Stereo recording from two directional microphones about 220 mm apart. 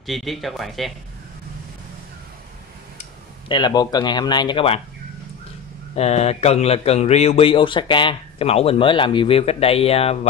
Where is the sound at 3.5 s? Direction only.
20° left (ahead or behind).